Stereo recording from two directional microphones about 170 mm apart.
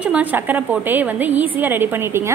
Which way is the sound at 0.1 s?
10° right (ahead or behind).